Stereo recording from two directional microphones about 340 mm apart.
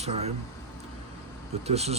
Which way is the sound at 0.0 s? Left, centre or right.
Centre.